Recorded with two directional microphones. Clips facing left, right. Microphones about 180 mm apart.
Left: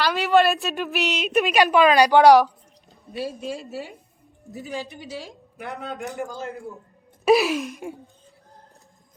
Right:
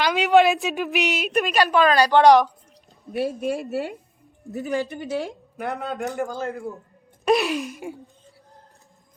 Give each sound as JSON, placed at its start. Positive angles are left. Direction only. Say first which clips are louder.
{"t": 0.0, "sound": "speech", "louder": "right 2 dB", "side_deg": -15}
{"t": 1.1, "sound": "speech", "louder": "left 4 dB", "side_deg": 0}
{"t": 3.1, "sound": "a man's voice", "louder": "right 5 dB", "side_deg": -60}
{"t": 6.4, "sound": "gasp", "louder": "right 4 dB", "side_deg": 0}